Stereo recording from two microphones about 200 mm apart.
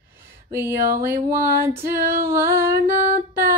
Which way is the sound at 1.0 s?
10° right (ahead or behind).